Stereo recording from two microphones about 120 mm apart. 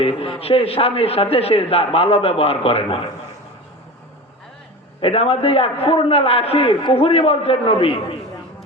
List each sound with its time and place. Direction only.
0.0 s a man's voice: 55° left (ahead or behind)
4.9 s a man's voice: 50° left (ahead or behind)